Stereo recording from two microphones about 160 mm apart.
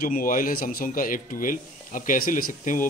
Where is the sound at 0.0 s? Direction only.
65° left (ahead or behind).